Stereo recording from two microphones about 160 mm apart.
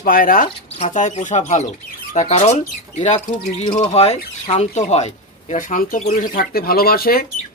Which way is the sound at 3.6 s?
30° left (ahead or behind).